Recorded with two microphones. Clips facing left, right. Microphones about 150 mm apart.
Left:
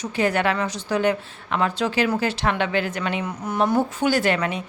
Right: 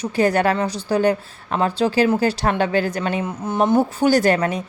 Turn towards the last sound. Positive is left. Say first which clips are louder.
# right 5 dB
turn(degrees=-40)  # may be behind; listen again after turning